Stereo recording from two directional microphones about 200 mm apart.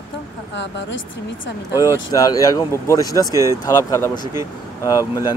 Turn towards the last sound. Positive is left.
turn(degrees=15)  # may be behind; listen again after turning